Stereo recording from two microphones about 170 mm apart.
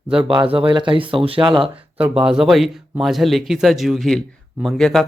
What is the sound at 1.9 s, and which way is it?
Speech, 5° right (ahead or behind).